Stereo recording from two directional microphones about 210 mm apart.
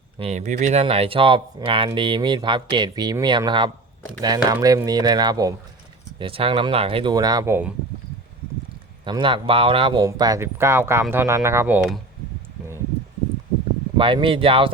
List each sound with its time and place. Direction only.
0.2 s speech: 35° right (ahead or behind); by 7.7 s 10° right (ahead or behind)
9.0 s speech: 20° right (ahead or behind); by 11.9 s 5° right (ahead or behind)
13.9 s speech: 25° right (ahead or behind)